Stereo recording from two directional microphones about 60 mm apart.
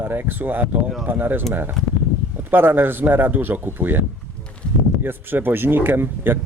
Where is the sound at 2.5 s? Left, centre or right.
Right.